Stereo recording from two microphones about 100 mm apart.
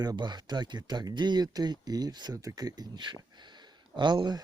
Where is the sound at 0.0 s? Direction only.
45° right (ahead or behind).